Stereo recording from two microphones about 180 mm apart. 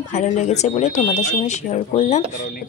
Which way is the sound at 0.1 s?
45° left (ahead or behind).